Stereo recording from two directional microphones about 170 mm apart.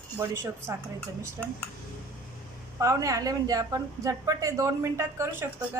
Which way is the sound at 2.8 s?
20° right (ahead or behind).